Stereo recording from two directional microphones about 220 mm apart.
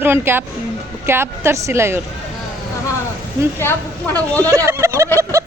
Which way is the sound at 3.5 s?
10° left (ahead or behind).